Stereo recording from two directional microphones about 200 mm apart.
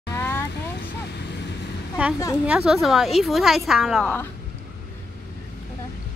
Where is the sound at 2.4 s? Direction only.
5° right (ahead or behind).